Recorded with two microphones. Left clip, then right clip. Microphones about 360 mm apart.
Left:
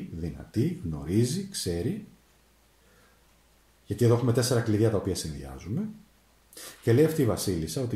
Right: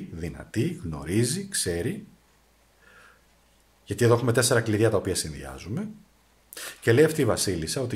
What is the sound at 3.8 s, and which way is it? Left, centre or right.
Speech, right.